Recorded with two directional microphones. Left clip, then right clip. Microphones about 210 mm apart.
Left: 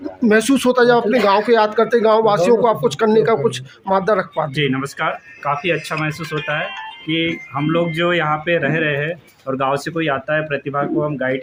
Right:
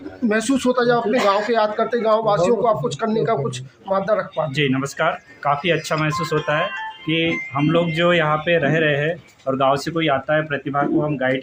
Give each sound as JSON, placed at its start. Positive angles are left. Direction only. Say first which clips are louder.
{"t": 0.3, "sound": "speech", "louder": "left 5 dB", "side_deg": 55}
{"t": 4.5, "sound": "speech", "louder": "left 1 dB", "side_deg": 10}